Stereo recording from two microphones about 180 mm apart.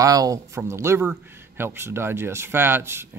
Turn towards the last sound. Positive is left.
turn(degrees=-15)  # may be behind; listen again after turning